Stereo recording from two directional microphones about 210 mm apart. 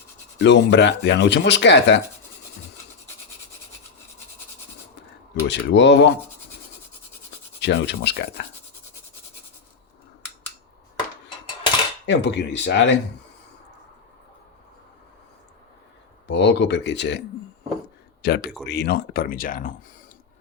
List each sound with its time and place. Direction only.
0.3 s speech: 55° left (ahead or behind)
5.3 s speech: 55° left (ahead or behind)
7.6 s speech: 55° left (ahead or behind)
12.0 s speech: 55° left (ahead or behind)
16.2 s speech: 55° left (ahead or behind); by 19.7 s 40° left (ahead or behind)